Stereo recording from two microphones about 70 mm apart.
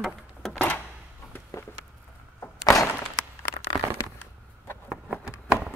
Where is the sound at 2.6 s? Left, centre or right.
Left.